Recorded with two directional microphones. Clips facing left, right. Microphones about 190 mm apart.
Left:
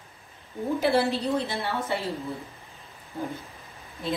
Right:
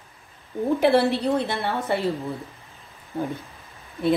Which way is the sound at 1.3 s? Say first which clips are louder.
Right 3 dB; 55° right (ahead or behind).